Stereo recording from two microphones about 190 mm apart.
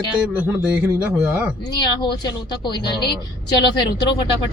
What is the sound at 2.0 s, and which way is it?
A woman's voice, 25° left (ahead or behind).